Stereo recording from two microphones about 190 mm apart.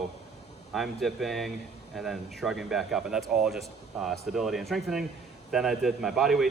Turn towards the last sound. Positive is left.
turn(degrees=0)  # may be behind; listen again after turning